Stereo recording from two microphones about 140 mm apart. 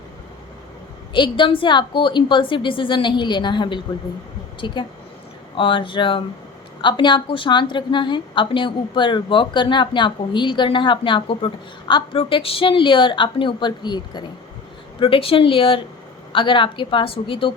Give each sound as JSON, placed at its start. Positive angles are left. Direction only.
{"t": 1.1, "sound": "a woman's voice", "side_deg": 35}